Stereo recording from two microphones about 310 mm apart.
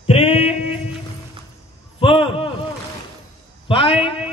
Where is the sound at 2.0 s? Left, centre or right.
Centre.